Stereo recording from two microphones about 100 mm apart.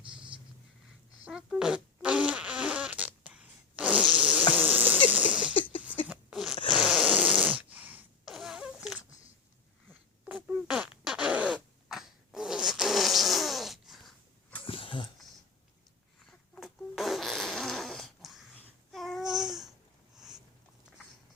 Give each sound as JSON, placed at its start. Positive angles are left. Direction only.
{"t": 1.2, "sound": "fart", "side_deg": -5}
{"t": 4.6, "sound": "insect", "side_deg": -15}
{"t": 5.0, "sound": "a sound", "side_deg": -15}
{"t": 5.5, "sound": "a sound", "side_deg": 60}
{"t": 6.3, "sound": "zipper", "side_deg": 0}
{"t": 6.7, "sound": "fart", "side_deg": -5}
{"t": 7.3, "sound": "snoring", "side_deg": -15}
{"t": 8.2, "sound": "fart", "side_deg": 0}
{"t": 10.3, "sound": "fart", "side_deg": -5}
{"t": 14.6, "sound": "mechanisms", "side_deg": 60}
{"t": 16.6, "sound": "fart", "side_deg": 0}
{"t": 18.9, "sound": "babbling", "side_deg": 0}
{"t": 20.1, "sound": "a sound", "side_deg": -5}